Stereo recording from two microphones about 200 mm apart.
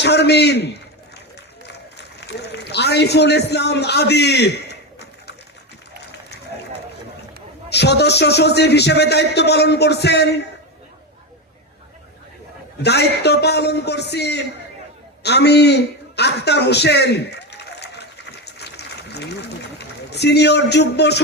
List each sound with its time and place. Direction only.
0.0 s a man's voice: 55° left (ahead or behind)
2.2 s a man's voice: 55° left (ahead or behind)
7.7 s a man's voice: 55° left (ahead or behind)
12.8 s a man's voice: 55° left (ahead or behind)
15.2 s a sound: 55° left (ahead or behind)